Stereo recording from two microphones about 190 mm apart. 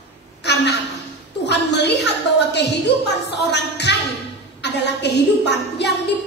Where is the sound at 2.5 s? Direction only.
65° left (ahead or behind).